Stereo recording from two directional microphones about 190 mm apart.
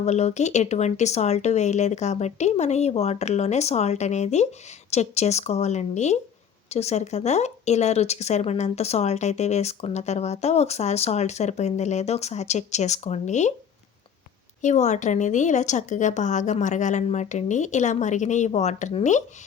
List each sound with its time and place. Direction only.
0.0 s speech: 35° left (ahead or behind)
14.6 s speech: 40° left (ahead or behind)